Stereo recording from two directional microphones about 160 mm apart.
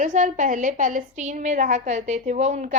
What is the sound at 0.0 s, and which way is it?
A woman's voice, 50° right (ahead or behind).